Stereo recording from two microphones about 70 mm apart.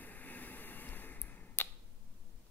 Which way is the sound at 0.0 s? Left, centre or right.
Left.